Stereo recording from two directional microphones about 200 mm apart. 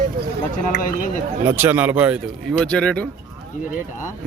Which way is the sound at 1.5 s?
10° right (ahead or behind).